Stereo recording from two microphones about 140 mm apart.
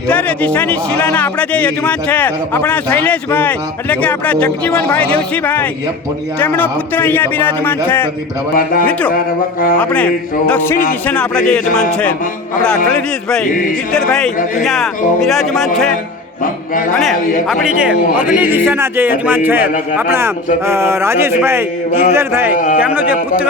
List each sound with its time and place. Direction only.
0.1 s speech: 10° left (ahead or behind)
8.5 s speech: 90° left
8.9 s speech: 10° left (ahead or behind)
9.1 s speech: 90° left
11.0 s speech: 10° left (ahead or behind)
13.9 s speech: 5° left (ahead or behind)
16.4 s music: 75° left (ahead or behind)
17.5 s speech: 5° right (ahead or behind)
18.1 s music: 75° left (ahead or behind)
18.3 s speech: 15° right (ahead or behind)
22.5 s music: 70° left (ahead or behind)
22.8 s speech: 10° right (ahead or behind)